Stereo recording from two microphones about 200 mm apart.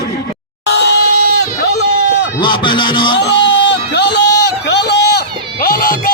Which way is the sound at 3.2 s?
60° left (ahead or behind).